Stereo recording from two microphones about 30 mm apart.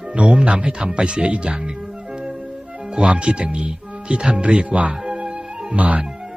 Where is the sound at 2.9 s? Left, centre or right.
Right.